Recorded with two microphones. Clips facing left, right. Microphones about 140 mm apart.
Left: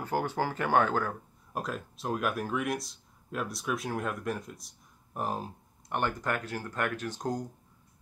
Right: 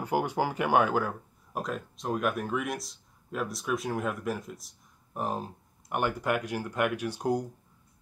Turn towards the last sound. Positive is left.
turn(degrees=-10)  # may be behind; listen again after turning